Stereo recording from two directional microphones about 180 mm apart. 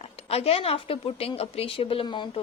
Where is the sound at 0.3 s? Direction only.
35° left (ahead or behind).